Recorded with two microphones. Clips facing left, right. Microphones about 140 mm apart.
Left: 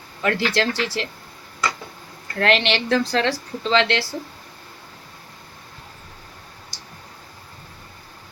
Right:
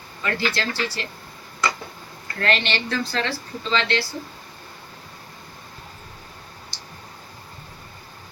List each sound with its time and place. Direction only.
0.2 s a woman's voice: 70° left (ahead or behind)
2.4 s a woman's voice: 75° left (ahead or behind)